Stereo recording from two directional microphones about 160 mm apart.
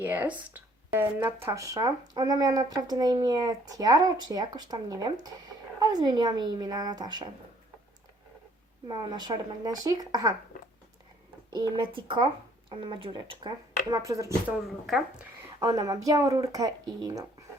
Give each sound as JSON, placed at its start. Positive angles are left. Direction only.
{"t": 0.0, "sound": "speech", "side_deg": -10}
{"t": 8.9, "sound": "speech", "side_deg": -25}
{"t": 11.5, "sound": "speech", "side_deg": -30}
{"t": 15.6, "sound": "speech", "side_deg": -20}